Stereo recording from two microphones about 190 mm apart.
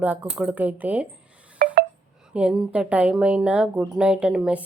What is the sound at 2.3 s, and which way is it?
A woman's voice, 5° right (ahead or behind).